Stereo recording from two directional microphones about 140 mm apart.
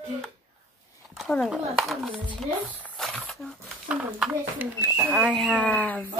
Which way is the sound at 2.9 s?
5° left (ahead or behind).